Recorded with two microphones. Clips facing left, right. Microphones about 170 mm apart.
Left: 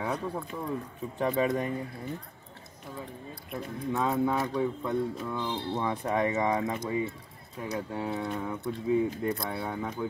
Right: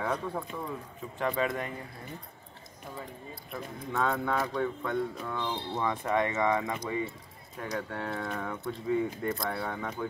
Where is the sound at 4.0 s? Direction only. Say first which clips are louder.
Left 1 dB; 5° left (ahead or behind).